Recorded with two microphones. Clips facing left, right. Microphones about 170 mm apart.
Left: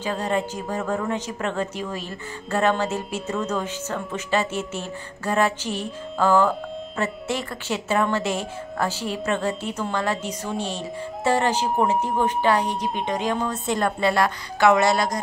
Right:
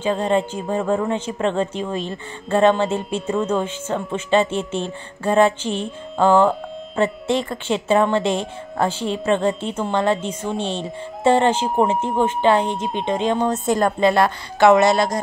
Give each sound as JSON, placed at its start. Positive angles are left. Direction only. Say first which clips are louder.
{"t": 0.0, "sound": "speech", "louder": "right 5 dB", "side_deg": -25}
{"t": 13.4, "sound": "a woman's voice", "louder": "right 5 dB", "side_deg": -45}
{"t": 13.9, "sound": "speech", "louder": "right 5 dB", "side_deg": -25}